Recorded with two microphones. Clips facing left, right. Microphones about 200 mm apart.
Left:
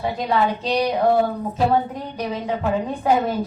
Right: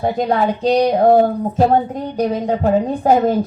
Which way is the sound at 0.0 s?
45° right (ahead or behind).